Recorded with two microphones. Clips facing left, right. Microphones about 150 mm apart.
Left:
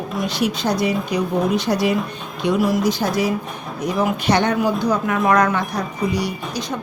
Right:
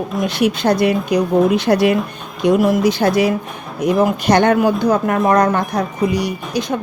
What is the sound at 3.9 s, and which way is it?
Speech, 45° right (ahead or behind).